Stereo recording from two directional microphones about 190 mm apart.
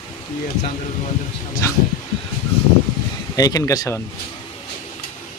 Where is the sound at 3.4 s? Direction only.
20° left (ahead or behind).